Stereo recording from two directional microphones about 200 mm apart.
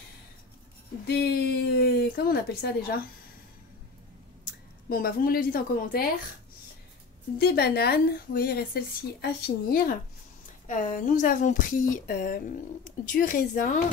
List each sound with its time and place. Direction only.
1.0 s a sound: 55° left (ahead or behind)
4.8 s a woman's voice: 45° left (ahead or behind)
7.3 s a woman's voice: 50° left (ahead or behind)